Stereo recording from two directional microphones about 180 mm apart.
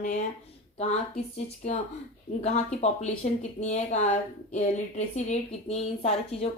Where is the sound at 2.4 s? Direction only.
40° left (ahead or behind).